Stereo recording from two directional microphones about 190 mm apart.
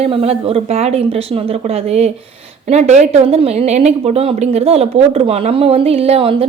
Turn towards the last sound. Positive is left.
turn(degrees=-30)  # may be behind; listen again after turning